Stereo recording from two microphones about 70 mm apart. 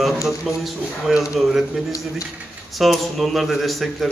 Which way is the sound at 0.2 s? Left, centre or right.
Left.